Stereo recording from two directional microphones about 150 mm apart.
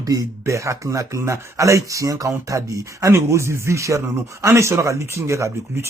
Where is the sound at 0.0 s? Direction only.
25° right (ahead or behind).